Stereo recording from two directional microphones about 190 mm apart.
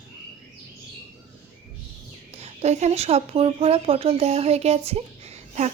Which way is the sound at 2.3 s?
35° right (ahead or behind).